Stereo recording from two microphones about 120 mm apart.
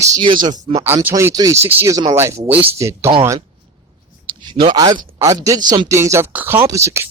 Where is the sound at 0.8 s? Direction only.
20° right (ahead or behind).